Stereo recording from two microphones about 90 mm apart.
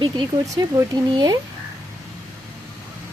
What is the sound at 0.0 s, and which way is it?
Speech, 40° right (ahead or behind).